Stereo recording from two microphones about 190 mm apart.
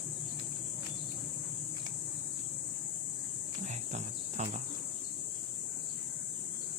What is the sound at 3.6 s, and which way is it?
Cricket, 35° right (ahead or behind).